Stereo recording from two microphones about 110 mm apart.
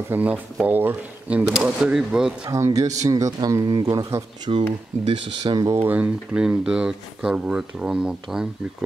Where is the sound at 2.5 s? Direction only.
30° right (ahead or behind).